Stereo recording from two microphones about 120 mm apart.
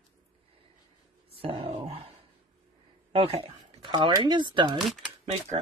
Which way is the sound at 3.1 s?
50° right (ahead or behind).